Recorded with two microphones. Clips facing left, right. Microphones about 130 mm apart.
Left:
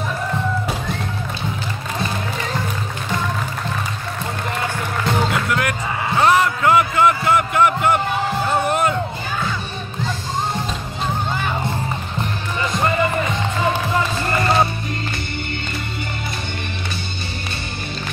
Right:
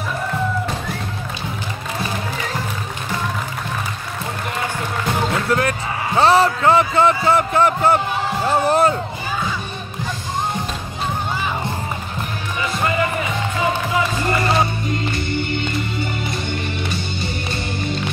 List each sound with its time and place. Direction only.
5.5 s a man's voice: 30° right (ahead or behind)